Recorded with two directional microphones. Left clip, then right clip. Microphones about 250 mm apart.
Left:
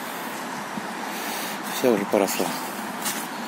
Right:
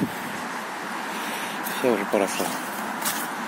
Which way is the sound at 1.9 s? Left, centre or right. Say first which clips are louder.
Left 2 dB; left.